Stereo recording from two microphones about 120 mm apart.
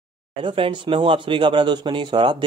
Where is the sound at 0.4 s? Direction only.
45° right (ahead or behind).